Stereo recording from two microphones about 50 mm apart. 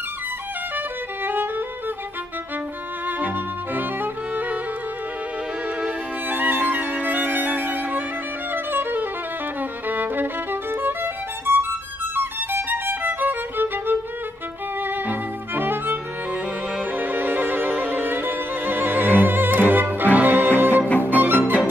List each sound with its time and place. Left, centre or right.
0.7 s music: right
3.1 s music: right
5.8 s violin: right
8.7 s music: right
9.6 s violin: right
14.8 s music: right